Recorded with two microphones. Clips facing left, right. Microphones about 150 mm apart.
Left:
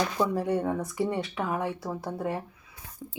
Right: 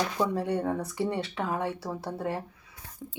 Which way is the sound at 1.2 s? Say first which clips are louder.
Left 1 dB; 25° right (ahead or behind).